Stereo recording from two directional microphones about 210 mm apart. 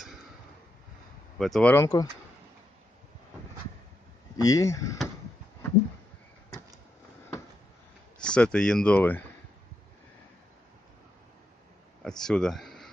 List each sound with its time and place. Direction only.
1.4 s speech: 5° left (ahead or behind)
4.4 s speech: 15° left (ahead or behind)
8.2 s speech: 5° left (ahead or behind)
12.0 s speech: centre (ahead or behind)